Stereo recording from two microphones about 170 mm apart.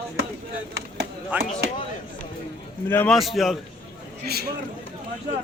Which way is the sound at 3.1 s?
Centre (ahead or behind).